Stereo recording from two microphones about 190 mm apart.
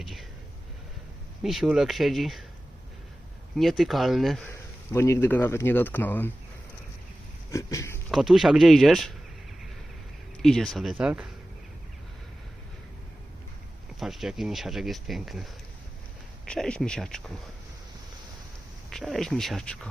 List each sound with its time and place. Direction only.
0.0 s whispering: centre (ahead or behind)
1.4 s speech: centre (ahead or behind)
3.6 s speech: centre (ahead or behind)
4.5 s speech: 15° left (ahead or behind)
7.5 s speech: 15° left (ahead or behind)
8.1 s speech: centre (ahead or behind)
10.4 s speech: centre (ahead or behind)
14.0 s speech: centre (ahead or behind)
16.5 s speech: 5° left (ahead or behind)
18.9 s speech: centre (ahead or behind)